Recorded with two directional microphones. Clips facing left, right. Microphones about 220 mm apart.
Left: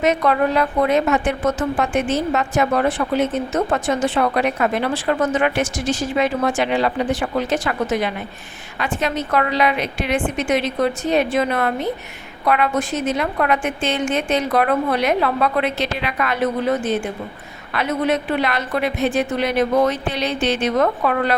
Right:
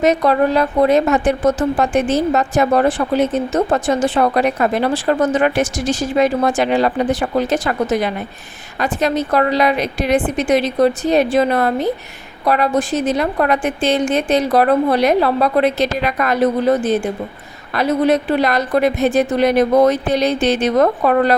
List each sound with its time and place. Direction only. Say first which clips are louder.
0.0 s a woman's voice: right 3 dB; 35° right (ahead or behind)